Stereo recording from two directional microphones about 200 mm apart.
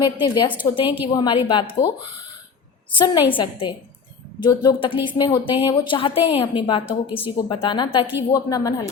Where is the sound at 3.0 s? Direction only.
20° left (ahead or behind).